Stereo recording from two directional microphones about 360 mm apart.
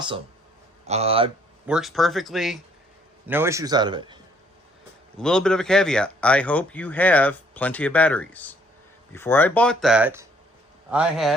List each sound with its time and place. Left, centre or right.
0.9 s a man's voice: centre
1.6 s a man's voice: centre
5.1 s speech: centre